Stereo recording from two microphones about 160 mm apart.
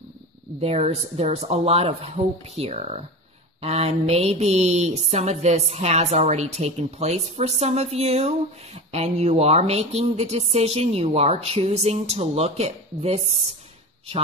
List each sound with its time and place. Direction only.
0.6 s speech: 40° right (ahead or behind)